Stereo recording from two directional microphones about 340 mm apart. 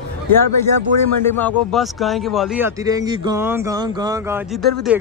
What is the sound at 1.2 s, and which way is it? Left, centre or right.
A man's voice, centre.